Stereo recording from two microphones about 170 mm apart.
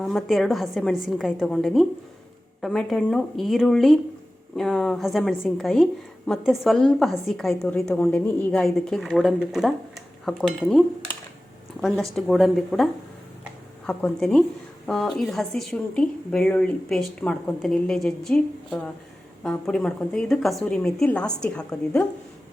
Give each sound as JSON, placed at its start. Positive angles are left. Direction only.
{"t": 0.0, "sound": "a woman's voice", "side_deg": 0}